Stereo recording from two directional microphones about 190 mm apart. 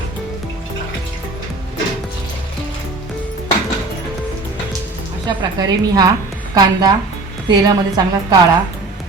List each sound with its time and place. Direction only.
5.2 s a woman's voice: 20° right (ahead or behind)